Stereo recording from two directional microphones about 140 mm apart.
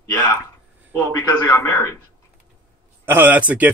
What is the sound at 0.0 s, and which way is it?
A man's voice, 20° left (ahead or behind).